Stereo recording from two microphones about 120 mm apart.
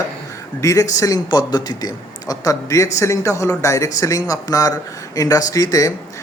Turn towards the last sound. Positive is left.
turn(degrees=30)  # may be behind; listen again after turning